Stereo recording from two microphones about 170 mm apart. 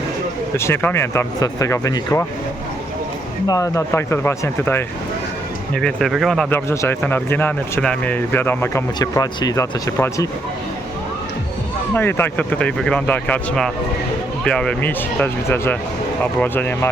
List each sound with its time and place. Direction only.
0.5 s speech: 15° left (ahead or behind)
3.4 s speech: 20° left (ahead or behind)
5.8 s speech: centre (ahead or behind)
6.7 s speech: 15° left (ahead or behind)
11.9 s speech: 15° left (ahead or behind)